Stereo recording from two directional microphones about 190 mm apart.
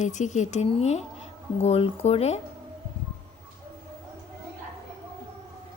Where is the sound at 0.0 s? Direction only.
40° left (ahead or behind).